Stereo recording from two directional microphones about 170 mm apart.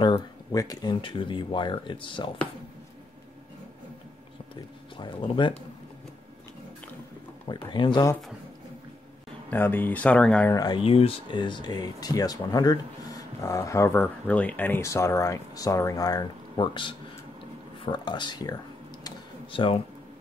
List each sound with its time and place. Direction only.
0.0 s speech: 25° left (ahead or behind)
4.9 s speech: 30° left (ahead or behind)
7.4 s speech: 30° left (ahead or behind)
9.5 s speech: 10° left (ahead or behind)
10.5 s speech: 20° left (ahead or behind)
10.8 s speech: 35° left (ahead or behind)
19.0 s tick-tock: 30° left (ahead or behind)